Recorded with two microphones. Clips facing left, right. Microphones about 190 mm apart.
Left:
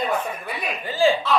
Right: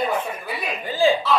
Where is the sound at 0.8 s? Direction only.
15° right (ahead or behind).